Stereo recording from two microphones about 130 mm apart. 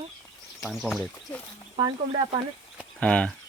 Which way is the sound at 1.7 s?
45° right (ahead or behind).